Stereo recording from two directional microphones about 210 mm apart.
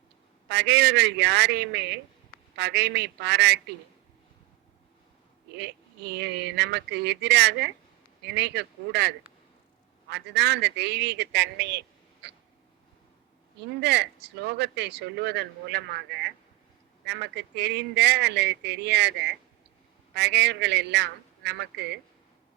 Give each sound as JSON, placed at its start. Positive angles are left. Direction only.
{"t": 0.4, "sound": "speech", "side_deg": -55}
{"t": 5.5, "sound": "speech", "side_deg": -55}
{"t": 13.8, "sound": "speech", "side_deg": -55}